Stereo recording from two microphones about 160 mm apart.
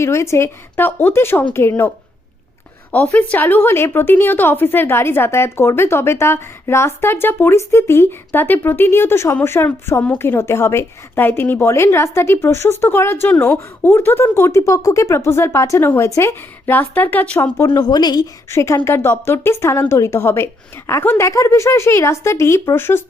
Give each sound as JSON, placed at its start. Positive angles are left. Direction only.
{"t": 0.0, "sound": "a woman's voice", "side_deg": 15}
{"t": 2.9, "sound": "a woman's voice", "side_deg": 10}
{"t": 17.7, "sound": "a woman's voice", "side_deg": 25}